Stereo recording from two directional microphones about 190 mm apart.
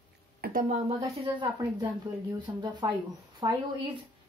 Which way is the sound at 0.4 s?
45° right (ahead or behind).